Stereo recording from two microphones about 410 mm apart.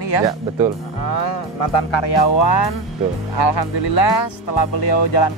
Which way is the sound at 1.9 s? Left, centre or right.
Left.